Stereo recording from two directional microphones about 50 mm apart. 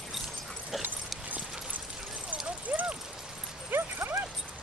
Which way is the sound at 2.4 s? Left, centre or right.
Right.